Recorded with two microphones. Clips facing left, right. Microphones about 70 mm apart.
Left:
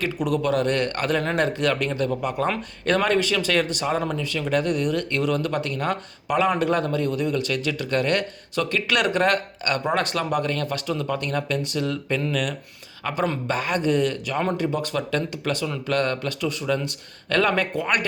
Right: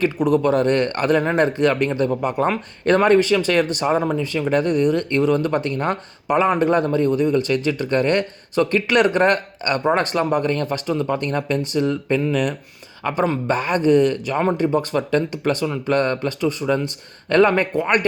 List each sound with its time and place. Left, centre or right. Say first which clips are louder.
0.0 s speech: right 6 dB; right